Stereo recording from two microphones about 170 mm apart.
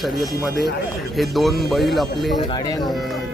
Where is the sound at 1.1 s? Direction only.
Centre (ahead or behind).